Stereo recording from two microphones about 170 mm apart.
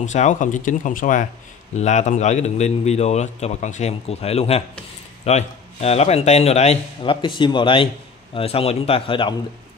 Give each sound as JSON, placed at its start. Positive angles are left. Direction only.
{"t": 0.0, "sound": "a man's voice", "side_deg": 45}